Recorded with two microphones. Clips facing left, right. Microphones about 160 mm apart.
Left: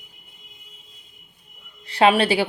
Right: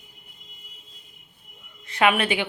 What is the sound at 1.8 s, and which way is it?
Speech, 30° left (ahead or behind).